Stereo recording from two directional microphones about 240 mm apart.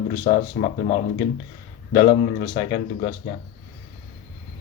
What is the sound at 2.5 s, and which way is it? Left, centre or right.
Speech, left.